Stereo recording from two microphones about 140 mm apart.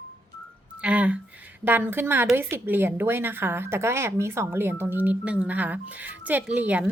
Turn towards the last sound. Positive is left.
turn(degrees=-10)  # may be behind; listen again after turning